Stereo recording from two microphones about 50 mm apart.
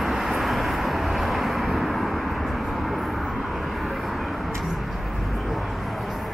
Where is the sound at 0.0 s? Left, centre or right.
Centre.